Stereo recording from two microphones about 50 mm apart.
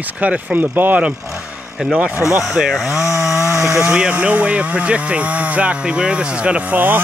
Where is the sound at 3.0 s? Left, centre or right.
Centre.